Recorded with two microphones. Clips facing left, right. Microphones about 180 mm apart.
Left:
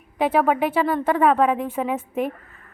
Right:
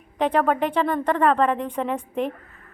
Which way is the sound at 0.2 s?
5° left (ahead or behind).